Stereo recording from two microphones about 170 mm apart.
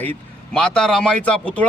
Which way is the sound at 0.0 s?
5° left (ahead or behind).